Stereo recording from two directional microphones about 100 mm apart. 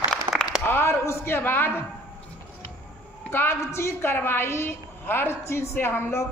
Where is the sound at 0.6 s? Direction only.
25° left (ahead or behind).